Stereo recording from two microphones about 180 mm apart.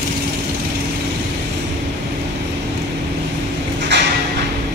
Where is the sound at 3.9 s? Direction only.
75° right (ahead or behind).